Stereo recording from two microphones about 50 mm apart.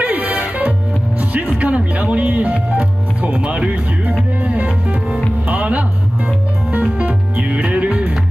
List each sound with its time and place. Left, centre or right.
0.0 s music: right